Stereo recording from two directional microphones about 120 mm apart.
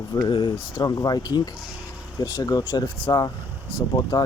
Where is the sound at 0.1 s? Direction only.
40° left (ahead or behind).